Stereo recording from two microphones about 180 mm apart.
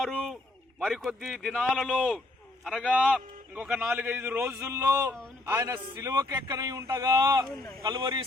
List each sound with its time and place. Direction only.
0.0 s a sound: centre (ahead or behind)
0.8 s a man's voice: centre (ahead or behind); by 7.4 s 20° right (ahead or behind)
7.4 s a man's voice: 5° left (ahead or behind)
7.8 s a man's voice: 25° right (ahead or behind)